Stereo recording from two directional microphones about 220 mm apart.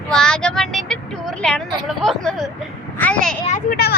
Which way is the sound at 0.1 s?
5° left (ahead or behind).